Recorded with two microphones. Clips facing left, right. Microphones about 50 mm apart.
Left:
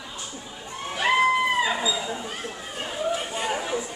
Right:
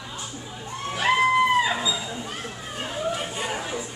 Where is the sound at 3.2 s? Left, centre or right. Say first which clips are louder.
Left 1 dB; centre.